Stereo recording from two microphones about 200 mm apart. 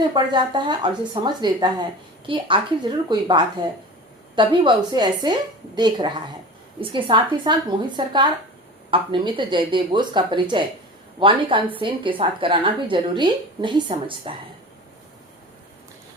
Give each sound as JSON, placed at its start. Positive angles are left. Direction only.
{"t": 0.0, "sound": "a woman's voice", "side_deg": -20}